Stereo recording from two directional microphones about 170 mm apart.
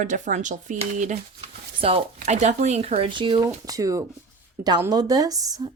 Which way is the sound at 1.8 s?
35° right (ahead or behind).